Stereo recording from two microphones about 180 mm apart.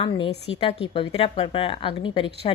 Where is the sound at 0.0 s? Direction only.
30° left (ahead or behind).